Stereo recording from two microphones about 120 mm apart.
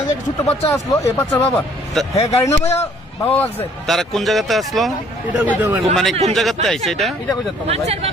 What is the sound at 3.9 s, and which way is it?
Speech, centre (ahead or behind).